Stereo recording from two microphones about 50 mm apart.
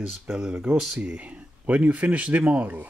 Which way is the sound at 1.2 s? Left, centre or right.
Right.